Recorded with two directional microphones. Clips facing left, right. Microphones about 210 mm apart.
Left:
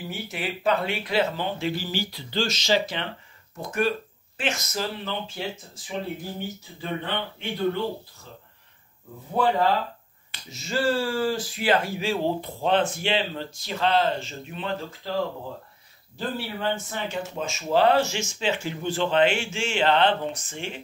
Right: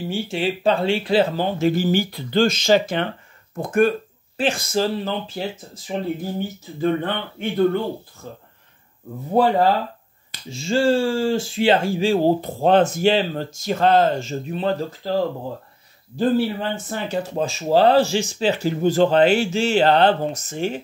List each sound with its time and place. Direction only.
0.1 s speech: 30° right (ahead or behind); by 3.9 s 50° right (ahead or behind)
4.4 s speech: 30° right (ahead or behind)
6.8 s speech: 50° right (ahead or behind)
10.3 s speech: 30° right (ahead or behind)
16.9 s speech: 35° right (ahead or behind)